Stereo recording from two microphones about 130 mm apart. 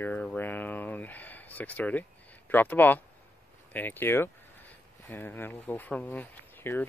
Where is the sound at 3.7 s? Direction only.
15° left (ahead or behind).